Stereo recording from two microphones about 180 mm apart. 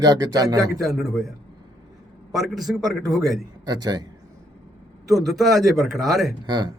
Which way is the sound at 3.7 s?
20° right (ahead or behind).